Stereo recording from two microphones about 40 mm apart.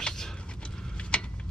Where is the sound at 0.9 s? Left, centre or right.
Left.